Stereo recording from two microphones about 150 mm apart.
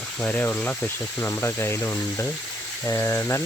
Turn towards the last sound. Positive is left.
turn(degrees=15)  # may be behind; listen again after turning